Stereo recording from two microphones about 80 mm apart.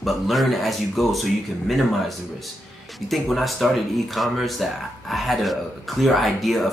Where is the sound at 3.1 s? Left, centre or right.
Centre.